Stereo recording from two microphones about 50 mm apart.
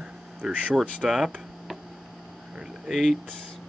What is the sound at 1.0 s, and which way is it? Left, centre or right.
Speech, centre.